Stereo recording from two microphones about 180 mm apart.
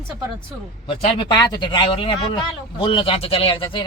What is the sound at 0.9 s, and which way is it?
Speech, 30° left (ahead or behind).